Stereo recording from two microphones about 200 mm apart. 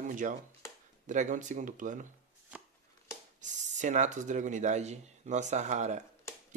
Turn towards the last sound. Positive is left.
turn(degrees=-35)  # may be behind; listen again after turning